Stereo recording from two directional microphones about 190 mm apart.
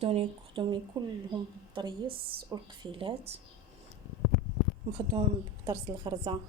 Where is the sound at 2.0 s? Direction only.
55° right (ahead or behind).